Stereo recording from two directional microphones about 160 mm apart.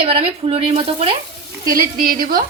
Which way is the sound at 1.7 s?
65° right (ahead or behind).